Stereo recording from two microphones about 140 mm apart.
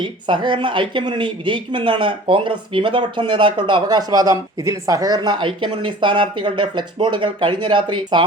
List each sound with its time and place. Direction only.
0.0 s speech: 35° right (ahead or behind)